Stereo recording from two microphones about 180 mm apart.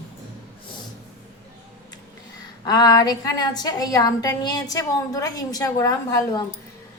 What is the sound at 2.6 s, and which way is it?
A woman's voice, 20° left (ahead or behind).